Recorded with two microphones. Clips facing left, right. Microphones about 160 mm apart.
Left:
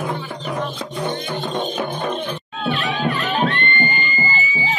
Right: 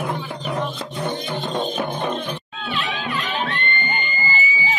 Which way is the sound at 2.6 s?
50° left (ahead or behind).